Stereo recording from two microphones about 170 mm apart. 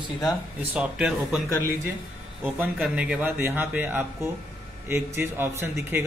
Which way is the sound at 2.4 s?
5° right (ahead or behind).